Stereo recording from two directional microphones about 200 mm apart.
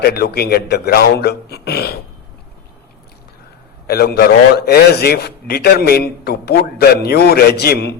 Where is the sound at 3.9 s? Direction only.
50° left (ahead or behind).